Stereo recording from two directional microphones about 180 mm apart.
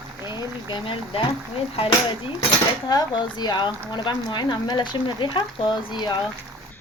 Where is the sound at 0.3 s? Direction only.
25° left (ahead or behind).